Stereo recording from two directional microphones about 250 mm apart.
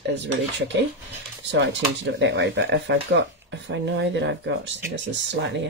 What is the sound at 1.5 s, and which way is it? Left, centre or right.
Speech, right.